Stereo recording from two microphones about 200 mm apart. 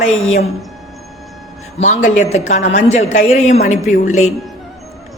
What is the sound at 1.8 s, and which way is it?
A man's voice, 40° left (ahead or behind).